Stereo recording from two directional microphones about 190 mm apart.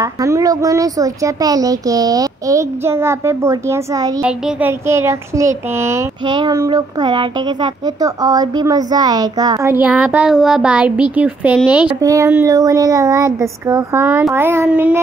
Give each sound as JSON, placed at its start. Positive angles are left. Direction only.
{"t": 0.0, "sound": "a child's voice", "side_deg": -15}
{"t": 4.2, "sound": "a child's voice", "side_deg": -5}
{"t": 12.0, "sound": "a child's voice", "side_deg": -15}